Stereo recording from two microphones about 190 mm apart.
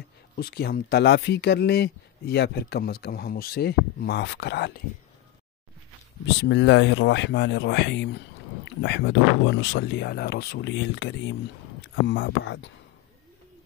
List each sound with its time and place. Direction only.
0.4 s speech: 55° left (ahead or behind)
6.2 s speech: 70° left (ahead or behind)